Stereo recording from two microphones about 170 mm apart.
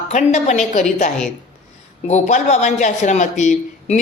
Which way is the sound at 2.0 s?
45° left (ahead or behind).